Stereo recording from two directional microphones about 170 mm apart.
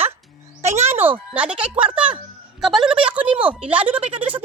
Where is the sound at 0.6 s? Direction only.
40° right (ahead or behind).